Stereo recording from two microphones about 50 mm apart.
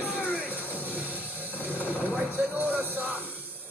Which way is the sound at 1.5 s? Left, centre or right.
Left.